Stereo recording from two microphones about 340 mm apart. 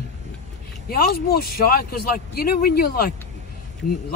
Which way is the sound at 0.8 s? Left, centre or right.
Left.